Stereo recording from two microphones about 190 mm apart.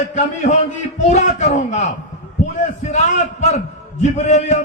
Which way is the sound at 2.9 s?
35° left (ahead or behind).